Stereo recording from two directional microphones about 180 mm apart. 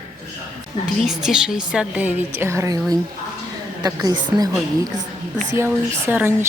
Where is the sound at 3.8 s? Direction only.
20° right (ahead or behind).